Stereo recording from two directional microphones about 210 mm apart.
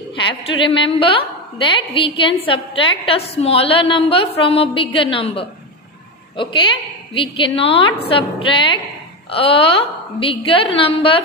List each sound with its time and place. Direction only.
0.1 s a woman's voice: 25° left (ahead or behind)